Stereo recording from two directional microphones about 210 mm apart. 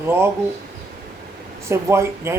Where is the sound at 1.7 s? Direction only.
10° right (ahead or behind).